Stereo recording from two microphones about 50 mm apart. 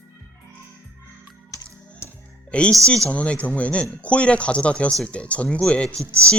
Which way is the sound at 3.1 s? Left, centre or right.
Left.